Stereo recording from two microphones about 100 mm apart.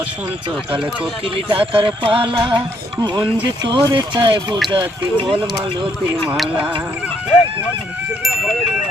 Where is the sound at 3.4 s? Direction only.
50° right (ahead or behind).